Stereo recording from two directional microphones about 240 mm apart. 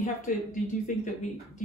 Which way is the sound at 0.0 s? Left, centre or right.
Left.